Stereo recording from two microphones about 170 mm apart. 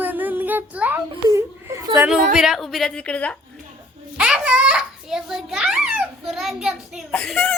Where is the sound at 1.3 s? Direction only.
15° right (ahead or behind).